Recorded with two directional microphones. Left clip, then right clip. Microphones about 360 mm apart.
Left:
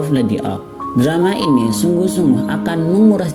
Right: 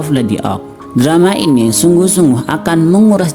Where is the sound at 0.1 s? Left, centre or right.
Centre.